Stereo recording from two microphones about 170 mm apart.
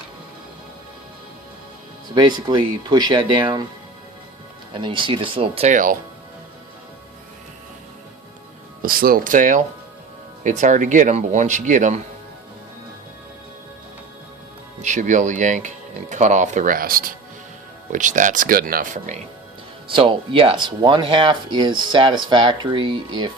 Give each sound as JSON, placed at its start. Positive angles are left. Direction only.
{"t": 2.1, "sound": "speech", "side_deg": -25}
{"t": 4.7, "sound": "speech", "side_deg": -30}
{"t": 5.7, "sound": "speech", "side_deg": -55}
{"t": 8.8, "sound": "speech", "side_deg": -60}
{"t": 14.8, "sound": "speech", "side_deg": -45}
{"t": 19.9, "sound": "speech", "side_deg": -30}